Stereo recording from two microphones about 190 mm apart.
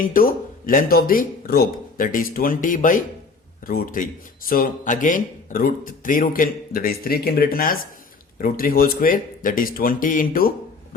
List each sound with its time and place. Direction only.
0.0 s speech: 50° left (ahead or behind)